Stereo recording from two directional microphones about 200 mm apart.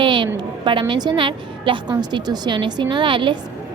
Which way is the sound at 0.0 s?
25° right (ahead or behind).